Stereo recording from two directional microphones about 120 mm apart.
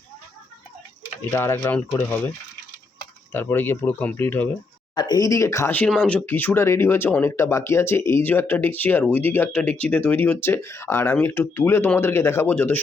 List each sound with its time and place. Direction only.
1.3 s speech: 25° left (ahead or behind)
3.3 s speech: 15° left (ahead or behind)
4.9 s speech: 35° left (ahead or behind); by 12.8 s 15° left (ahead or behind)